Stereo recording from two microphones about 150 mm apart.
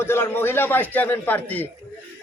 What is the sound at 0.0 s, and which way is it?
A man's voice, 15° left (ahead or behind).